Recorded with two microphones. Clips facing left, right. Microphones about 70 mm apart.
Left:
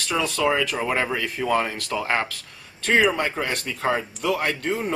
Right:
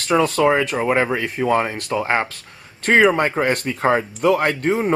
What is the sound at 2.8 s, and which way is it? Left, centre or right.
Speech, right.